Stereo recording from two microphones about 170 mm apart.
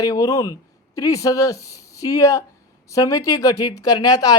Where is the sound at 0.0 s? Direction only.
20° left (ahead or behind).